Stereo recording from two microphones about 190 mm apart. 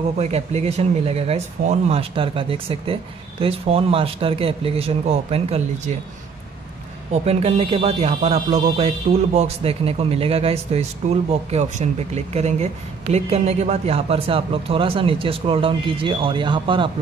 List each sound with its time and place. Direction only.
0.2 s speech: 35° right (ahead or behind)
7.1 s speech: 35° right (ahead or behind)